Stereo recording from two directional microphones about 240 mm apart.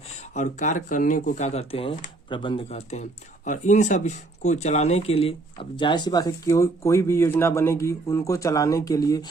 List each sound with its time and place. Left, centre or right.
0.2 s speech: left; by 9.3 s centre